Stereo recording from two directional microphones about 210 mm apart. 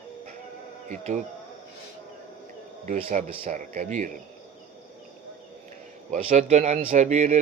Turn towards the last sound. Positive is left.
turn(degrees=-30)  # may be behind; listen again after turning